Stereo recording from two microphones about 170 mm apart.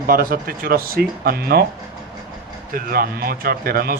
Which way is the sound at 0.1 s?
55° right (ahead or behind).